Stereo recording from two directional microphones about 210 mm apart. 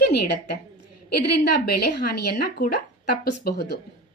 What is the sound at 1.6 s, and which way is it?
Speech, 50° left (ahead or behind).